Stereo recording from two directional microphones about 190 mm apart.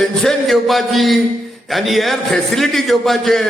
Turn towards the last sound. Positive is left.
turn(degrees=0)  # may be behind; listen again after turning